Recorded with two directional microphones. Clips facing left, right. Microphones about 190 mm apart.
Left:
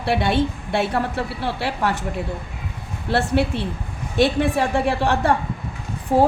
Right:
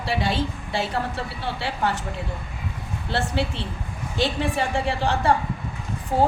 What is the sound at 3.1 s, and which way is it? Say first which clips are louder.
A woman's voice: left 6 dB; 60° left (ahead or behind).